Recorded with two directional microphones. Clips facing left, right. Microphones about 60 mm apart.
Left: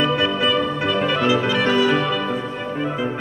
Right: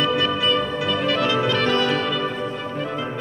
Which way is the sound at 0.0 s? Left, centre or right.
Centre.